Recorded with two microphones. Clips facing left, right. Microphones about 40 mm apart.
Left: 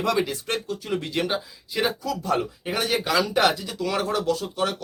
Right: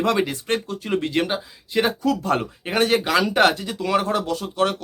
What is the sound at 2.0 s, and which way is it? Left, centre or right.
Speech, right.